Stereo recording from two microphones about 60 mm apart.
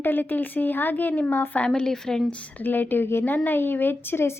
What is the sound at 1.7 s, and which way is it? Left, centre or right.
Speech, centre.